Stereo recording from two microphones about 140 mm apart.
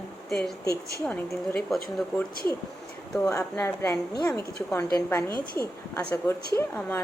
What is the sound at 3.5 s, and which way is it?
A woman's voice, 15° left (ahead or behind).